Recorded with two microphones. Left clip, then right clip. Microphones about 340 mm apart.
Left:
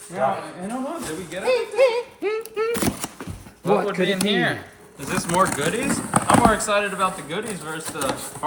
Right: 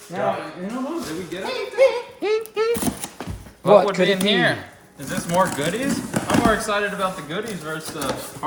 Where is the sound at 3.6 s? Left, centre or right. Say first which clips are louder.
Right 6 dB; centre.